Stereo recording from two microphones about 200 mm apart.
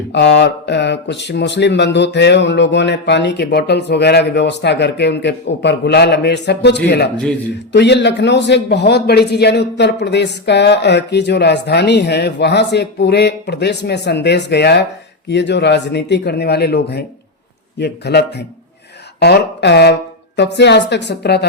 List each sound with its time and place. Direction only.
0.1 s speech: 60° left (ahead or behind)